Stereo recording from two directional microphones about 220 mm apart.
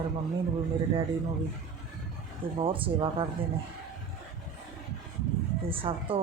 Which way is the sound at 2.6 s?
25° right (ahead or behind).